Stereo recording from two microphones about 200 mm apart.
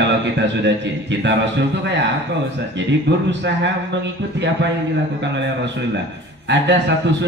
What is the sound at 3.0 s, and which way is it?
A man's voice, 60° right (ahead or behind).